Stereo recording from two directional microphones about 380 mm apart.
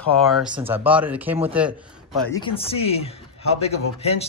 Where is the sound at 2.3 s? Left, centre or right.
Centre.